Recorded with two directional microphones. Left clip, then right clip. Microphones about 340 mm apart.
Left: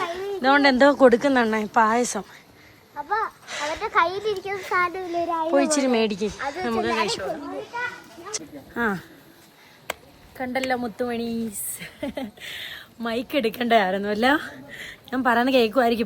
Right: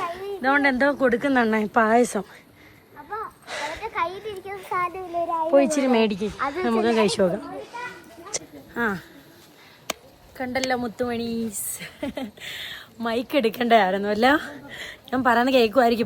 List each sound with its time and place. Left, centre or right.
0.1 s speech: centre
3.4 s a sound: centre
3.8 s a child's voice: left
5.5 s speech: centre
8.3 s a sound: centre
8.7 s speech: centre
10.3 s speech: centre